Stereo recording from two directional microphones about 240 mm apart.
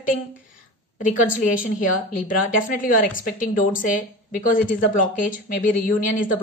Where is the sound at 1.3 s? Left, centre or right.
Left.